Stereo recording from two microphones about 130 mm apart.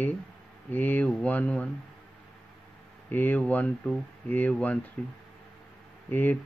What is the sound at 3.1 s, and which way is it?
Speech, 15° left (ahead or behind).